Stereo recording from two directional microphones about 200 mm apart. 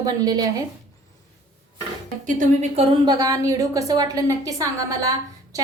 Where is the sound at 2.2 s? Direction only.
40° right (ahead or behind).